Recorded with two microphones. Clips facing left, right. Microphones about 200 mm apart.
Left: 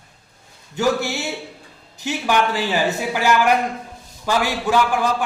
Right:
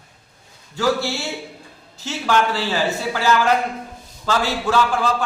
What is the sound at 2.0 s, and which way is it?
A man's voice, 15° left (ahead or behind).